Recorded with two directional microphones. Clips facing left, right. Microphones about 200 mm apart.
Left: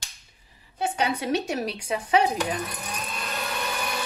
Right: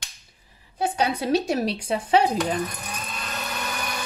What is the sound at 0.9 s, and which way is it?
Speech, 35° right (ahead or behind).